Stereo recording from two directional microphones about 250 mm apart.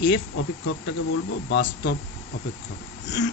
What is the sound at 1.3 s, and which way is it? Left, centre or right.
Speech, left.